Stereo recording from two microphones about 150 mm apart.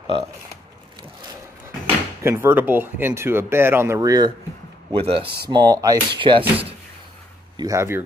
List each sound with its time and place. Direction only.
2.2 s speech: 15° right (ahead or behind)
4.9 s speech: 40° right (ahead or behind)
5.2 s speech: 90° right
5.5 s speech: 25° right (ahead or behind)
7.5 s speech: 20° right (ahead or behind)